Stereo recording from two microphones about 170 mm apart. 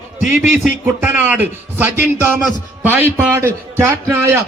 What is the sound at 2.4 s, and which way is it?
A man's voice, 10° right (ahead or behind).